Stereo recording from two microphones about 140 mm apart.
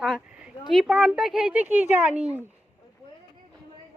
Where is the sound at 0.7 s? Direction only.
Centre (ahead or behind).